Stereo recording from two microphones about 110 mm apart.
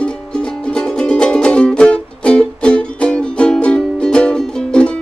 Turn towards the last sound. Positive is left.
turn(degrees=10)  # may be behind; listen again after turning